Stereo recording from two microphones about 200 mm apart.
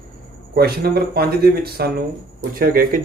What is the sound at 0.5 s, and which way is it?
Speech, 50° right (ahead or behind).